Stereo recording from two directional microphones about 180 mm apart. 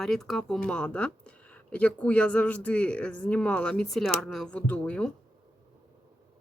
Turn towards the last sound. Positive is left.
turn(degrees=5)  # may be behind; listen again after turning